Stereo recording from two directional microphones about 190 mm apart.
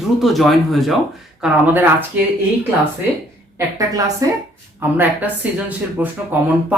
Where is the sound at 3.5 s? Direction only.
20° right (ahead or behind).